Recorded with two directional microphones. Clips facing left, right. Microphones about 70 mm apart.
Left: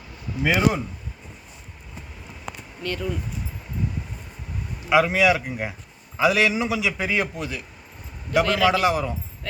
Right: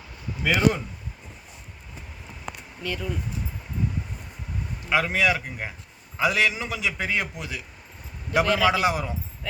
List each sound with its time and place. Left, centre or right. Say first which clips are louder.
0.4 s speech: left 1 dB; centre
2.8 s a man's voice: left 3 dB; centre
4.9 s a man's voice: left 5 dB; centre
8.8 s a man's voice: left 3 dB; centre